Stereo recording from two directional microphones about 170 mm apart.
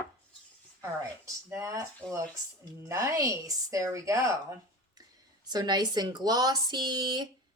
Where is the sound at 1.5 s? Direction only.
15° right (ahead or behind).